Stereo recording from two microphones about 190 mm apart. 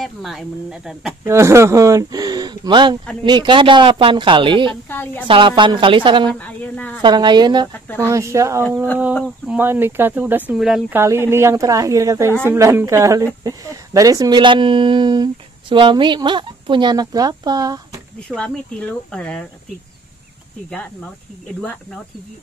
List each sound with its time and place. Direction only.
0.0 s speech: centre (ahead or behind)
1.2 s a woman's voice: 15° right (ahead or behind)
4.8 s a woman's voice: 10° left (ahead or behind)
5.2 s a woman's voice: 25° right (ahead or behind)
6.4 s a sound: 10° left (ahead or behind)
7.0 s a woman's voice: 25° right (ahead or behind)
7.7 s speech: 10° left (ahead or behind)
8.1 s a woman's voice: 15° right (ahead or behind)
11.0 s a woman's voice: 15° right (ahead or behind)
18.3 s speech: 5° left (ahead or behind)
20.7 s speech: 5° left (ahead or behind)